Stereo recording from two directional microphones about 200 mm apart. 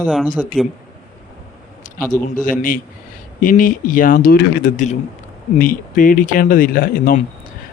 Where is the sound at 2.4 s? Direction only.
40° left (ahead or behind).